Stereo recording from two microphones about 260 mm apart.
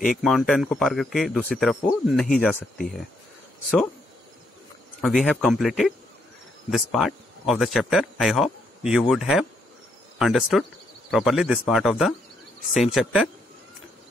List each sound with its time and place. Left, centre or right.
0.2 s speech: centre
5.0 s speech: centre